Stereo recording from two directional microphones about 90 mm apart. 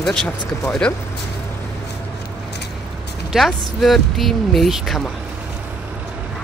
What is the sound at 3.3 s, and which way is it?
Speech, 5° right (ahead or behind).